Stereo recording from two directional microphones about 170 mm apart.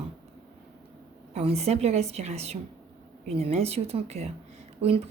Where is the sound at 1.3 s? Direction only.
35° right (ahead or behind).